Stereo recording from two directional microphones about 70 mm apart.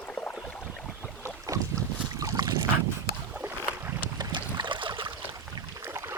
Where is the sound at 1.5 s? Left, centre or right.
Right.